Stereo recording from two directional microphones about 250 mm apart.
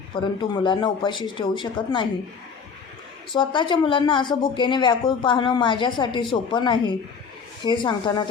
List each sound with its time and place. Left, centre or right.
0.1 s speech: centre
3.3 s speech: centre